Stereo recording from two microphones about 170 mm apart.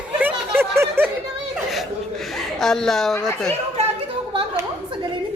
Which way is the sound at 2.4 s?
Centre (ahead or behind).